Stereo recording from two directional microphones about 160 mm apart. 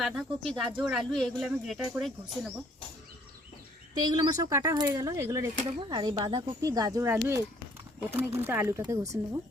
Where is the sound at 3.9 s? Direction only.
25° right (ahead or behind).